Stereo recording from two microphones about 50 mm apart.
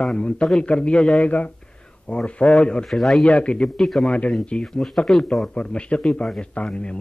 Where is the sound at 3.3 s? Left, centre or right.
Left.